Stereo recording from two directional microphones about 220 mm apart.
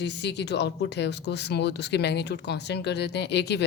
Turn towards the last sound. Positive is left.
turn(degrees=50)  # may be behind; listen again after turning